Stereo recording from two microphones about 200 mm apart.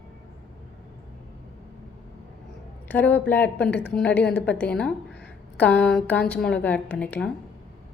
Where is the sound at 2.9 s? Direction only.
10° left (ahead or behind).